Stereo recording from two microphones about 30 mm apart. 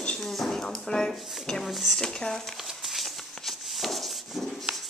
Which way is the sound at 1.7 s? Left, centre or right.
Centre.